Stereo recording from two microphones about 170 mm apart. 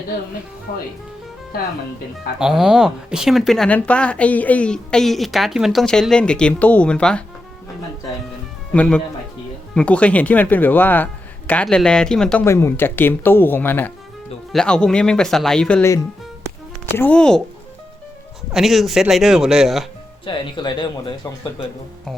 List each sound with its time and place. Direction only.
2.4 s speech: 5° right (ahead or behind)
8.7 s speech: 10° left (ahead or behind)
18.5 s speech: centre (ahead or behind)
20.2 s speech: 25° left (ahead or behind)